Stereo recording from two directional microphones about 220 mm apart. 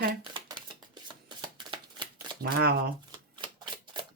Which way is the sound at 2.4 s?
45° right (ahead or behind).